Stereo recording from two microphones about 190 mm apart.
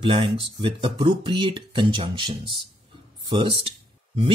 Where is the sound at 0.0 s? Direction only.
25° right (ahead or behind).